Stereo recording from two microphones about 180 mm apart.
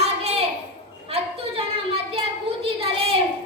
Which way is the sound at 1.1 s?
30° right (ahead or behind).